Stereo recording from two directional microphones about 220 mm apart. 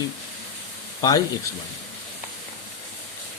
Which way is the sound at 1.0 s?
15° left (ahead or behind).